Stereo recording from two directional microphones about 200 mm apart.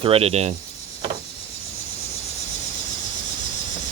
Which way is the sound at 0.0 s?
30° right (ahead or behind).